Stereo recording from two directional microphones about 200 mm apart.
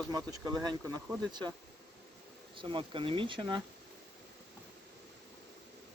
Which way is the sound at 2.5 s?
25° right (ahead or behind).